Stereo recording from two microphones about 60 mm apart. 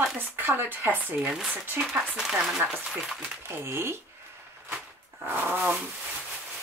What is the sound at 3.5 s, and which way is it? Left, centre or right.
Speech, right.